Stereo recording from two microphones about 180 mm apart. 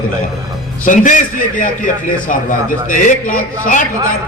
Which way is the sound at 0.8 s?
45° left (ahead or behind).